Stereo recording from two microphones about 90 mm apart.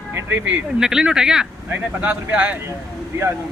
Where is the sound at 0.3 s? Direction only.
15° right (ahead or behind).